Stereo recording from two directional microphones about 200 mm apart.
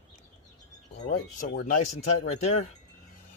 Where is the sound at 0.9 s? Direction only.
40° left (ahead or behind).